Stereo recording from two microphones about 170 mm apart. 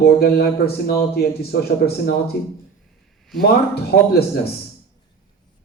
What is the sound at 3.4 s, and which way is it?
Speech, 70° left (ahead or behind).